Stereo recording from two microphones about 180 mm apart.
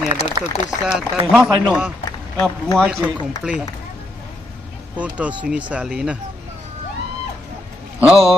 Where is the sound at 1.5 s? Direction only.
25° right (ahead or behind).